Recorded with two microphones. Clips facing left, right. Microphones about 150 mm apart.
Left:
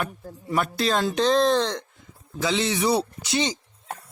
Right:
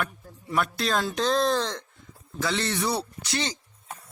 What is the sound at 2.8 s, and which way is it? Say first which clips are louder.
Speech: left 6 dB; 20° left (ahead or behind).